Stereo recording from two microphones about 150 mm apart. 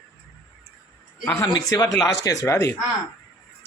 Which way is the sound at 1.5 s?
25° left (ahead or behind).